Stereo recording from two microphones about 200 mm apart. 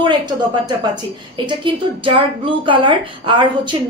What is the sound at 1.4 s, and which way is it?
A woman's voice, 25° right (ahead or behind).